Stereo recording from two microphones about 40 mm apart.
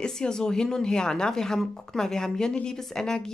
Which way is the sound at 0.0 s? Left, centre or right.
Centre.